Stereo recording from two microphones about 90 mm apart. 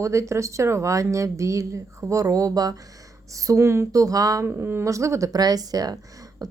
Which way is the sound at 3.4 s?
35° right (ahead or behind).